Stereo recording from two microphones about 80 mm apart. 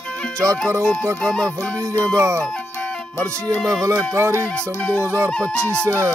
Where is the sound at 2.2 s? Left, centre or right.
Right.